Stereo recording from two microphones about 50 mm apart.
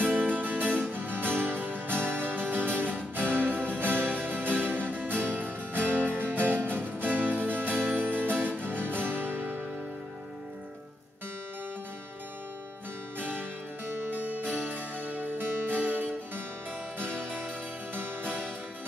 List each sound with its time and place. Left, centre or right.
0.0 s music: right
14.1 s music: right
17.9 s music: right